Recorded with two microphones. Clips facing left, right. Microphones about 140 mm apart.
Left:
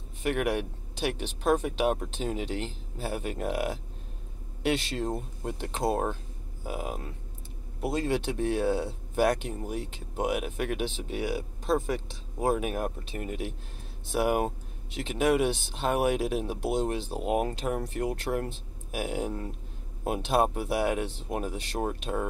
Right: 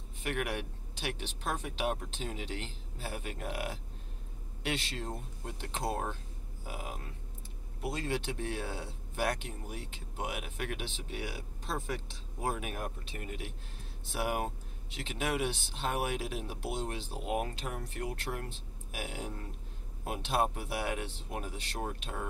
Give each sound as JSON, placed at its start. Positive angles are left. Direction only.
{"t": 0.2, "sound": "speech", "side_deg": 50}
{"t": 8.1, "sound": "speech", "side_deg": 50}
{"t": 8.6, "sound": "speech", "side_deg": 65}
{"t": 9.2, "sound": "speech", "side_deg": 40}